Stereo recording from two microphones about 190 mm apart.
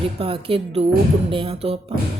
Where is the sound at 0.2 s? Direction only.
30° right (ahead or behind).